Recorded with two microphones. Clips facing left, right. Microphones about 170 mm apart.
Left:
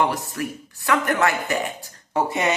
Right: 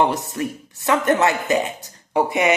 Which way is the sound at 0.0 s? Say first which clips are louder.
Right 3 dB; 20° right (ahead or behind).